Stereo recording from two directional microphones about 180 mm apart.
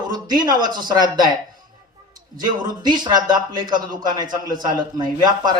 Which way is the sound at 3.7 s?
25° right (ahead or behind).